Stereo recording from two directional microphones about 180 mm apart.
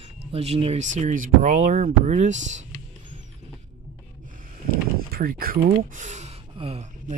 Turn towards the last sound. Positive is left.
turn(degrees=-35)  # may be behind; listen again after turning